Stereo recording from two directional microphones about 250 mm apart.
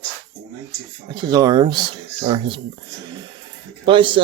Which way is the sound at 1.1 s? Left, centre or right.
Centre.